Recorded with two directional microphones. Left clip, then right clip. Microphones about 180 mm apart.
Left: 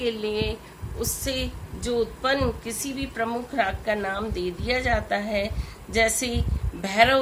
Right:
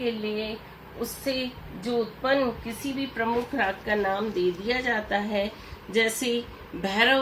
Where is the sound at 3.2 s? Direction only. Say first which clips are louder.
Left 1 dB; 40° left (ahead or behind).